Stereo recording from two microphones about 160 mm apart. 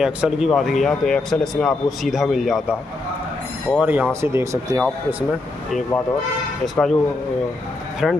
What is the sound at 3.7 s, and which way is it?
Speech, 10° right (ahead or behind).